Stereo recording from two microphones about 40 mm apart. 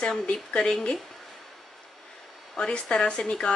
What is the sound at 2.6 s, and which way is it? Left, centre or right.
Speech, left.